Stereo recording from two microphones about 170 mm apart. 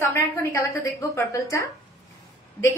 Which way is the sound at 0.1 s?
15° left (ahead or behind).